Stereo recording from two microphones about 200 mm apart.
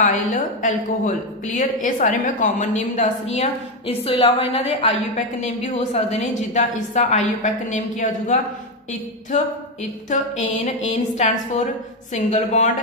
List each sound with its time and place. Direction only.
0.0 s a woman's voice: 40° left (ahead or behind)
10.0 s a woman's voice: 35° left (ahead or behind)